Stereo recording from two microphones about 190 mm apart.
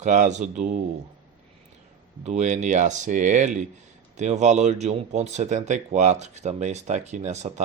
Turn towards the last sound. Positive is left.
turn(degrees=-35)  # may be behind; listen again after turning